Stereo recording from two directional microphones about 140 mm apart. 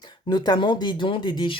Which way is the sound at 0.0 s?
30° left (ahead or behind).